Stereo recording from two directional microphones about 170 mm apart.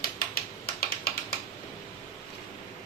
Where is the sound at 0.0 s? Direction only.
60° left (ahead or behind).